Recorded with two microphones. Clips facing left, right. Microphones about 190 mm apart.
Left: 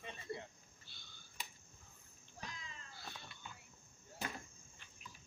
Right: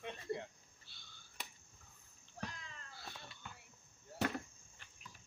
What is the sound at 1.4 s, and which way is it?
Cricket, 70° right (ahead or behind).